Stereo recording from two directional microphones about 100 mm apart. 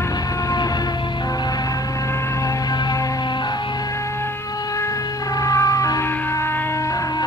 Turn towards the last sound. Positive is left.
turn(degrees=35)  # may be behind; listen again after turning